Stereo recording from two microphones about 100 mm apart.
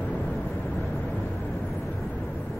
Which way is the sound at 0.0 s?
10° left (ahead or behind).